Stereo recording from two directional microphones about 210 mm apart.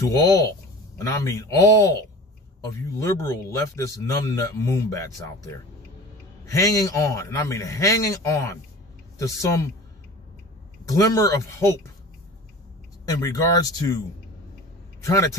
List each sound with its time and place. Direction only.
0.0 s a man's voice: 15° left (ahead or behind)
10.9 s a man's voice: 15° left (ahead or behind)
13.0 s a man's voice: 15° left (ahead or behind)